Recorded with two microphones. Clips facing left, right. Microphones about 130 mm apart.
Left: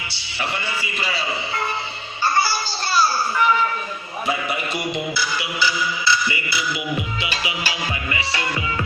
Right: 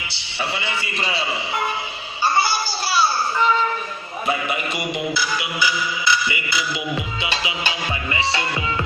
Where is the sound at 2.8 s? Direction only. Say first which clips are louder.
Left 1 dB; centre (ahead or behind).